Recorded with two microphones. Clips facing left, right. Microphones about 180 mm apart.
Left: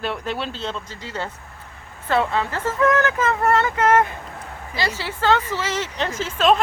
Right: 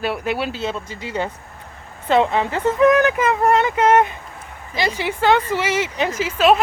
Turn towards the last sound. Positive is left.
turn(degrees=-5)  # may be behind; listen again after turning